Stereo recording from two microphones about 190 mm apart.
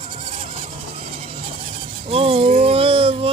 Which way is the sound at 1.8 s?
30° right (ahead or behind).